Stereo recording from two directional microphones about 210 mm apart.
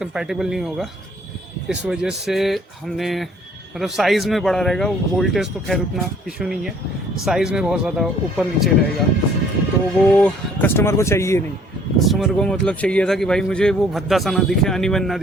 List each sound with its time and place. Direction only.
0.0 s speech: 5° right (ahead or behind)
10.1 s speech: 5° left (ahead or behind)
11.9 s speech: centre (ahead or behind)